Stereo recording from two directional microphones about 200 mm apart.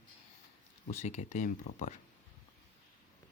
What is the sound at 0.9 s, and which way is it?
Speech, 35° left (ahead or behind).